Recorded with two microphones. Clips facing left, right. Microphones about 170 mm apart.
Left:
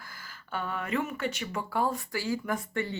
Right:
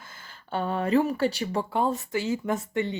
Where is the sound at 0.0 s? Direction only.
25° right (ahead or behind).